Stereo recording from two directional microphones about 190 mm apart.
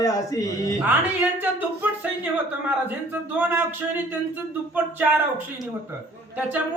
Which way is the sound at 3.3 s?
10° right (ahead or behind).